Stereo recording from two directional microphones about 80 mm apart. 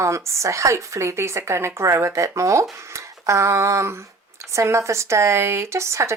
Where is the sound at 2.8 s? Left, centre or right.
Right.